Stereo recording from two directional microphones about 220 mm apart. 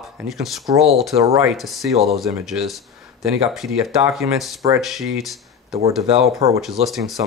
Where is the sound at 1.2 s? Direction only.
10° right (ahead or behind).